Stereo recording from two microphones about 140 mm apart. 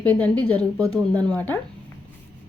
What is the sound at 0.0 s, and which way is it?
A woman's voice, 10° left (ahead or behind).